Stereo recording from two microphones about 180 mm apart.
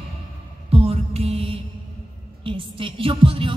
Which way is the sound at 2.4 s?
30° right (ahead or behind).